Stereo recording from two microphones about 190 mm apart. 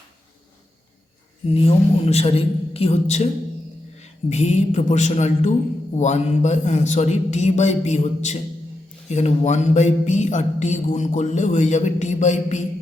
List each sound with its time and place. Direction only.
1.5 s speech: 35° left (ahead or behind)